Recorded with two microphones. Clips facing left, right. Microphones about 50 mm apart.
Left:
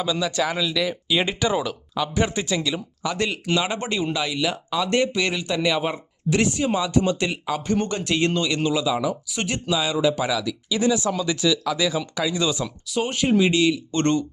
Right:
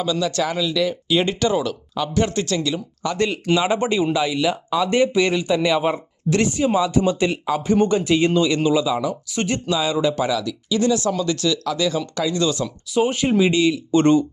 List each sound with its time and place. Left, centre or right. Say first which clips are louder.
0.0 s speech: right 2 dB; centre
12.6 s speech: right 6 dB; centre